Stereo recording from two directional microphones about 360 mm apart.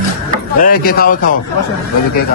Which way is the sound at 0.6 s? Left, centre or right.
Left.